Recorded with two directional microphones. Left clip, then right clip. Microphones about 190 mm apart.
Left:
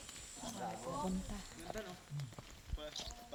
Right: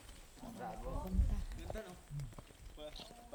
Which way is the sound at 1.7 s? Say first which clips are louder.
Left 1 dB; 30° left (ahead or behind).